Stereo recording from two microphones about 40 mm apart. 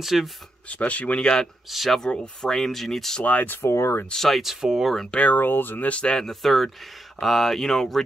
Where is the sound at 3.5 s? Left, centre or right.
Left.